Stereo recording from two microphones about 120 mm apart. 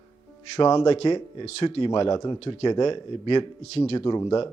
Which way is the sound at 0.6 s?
40° left (ahead or behind).